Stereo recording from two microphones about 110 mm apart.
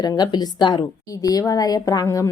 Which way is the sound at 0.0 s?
40° left (ahead or behind).